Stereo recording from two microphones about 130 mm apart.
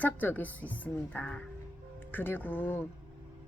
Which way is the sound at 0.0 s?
15° left (ahead or behind).